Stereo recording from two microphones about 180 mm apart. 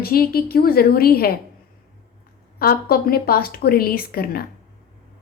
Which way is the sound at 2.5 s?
55° left (ahead or behind).